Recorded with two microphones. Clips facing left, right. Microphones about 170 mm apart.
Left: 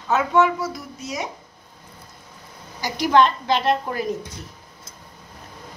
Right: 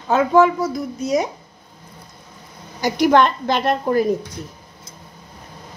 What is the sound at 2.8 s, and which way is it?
A woman's voice, 55° right (ahead or behind).